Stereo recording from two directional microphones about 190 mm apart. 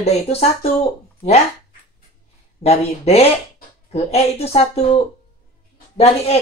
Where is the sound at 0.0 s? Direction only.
35° left (ahead or behind).